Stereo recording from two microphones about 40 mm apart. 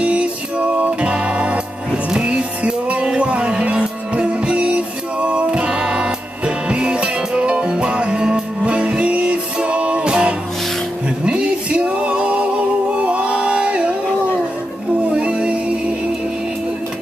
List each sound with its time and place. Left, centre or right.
0.0 s music: right
15.0 s music: right